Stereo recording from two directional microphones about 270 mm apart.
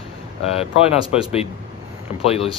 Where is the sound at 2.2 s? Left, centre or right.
Left.